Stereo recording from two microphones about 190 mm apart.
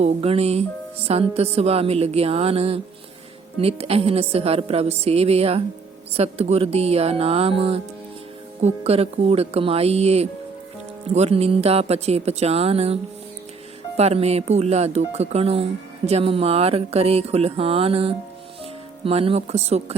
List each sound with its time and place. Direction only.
0.0 s speech: 30° right (ahead or behind)